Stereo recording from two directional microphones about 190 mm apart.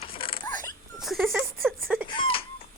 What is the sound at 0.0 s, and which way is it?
Dog, 30° left (ahead or behind).